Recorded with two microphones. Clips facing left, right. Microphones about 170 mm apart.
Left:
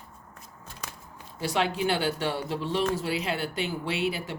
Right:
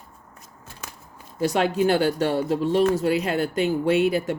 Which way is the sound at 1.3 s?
45° right (ahead or behind).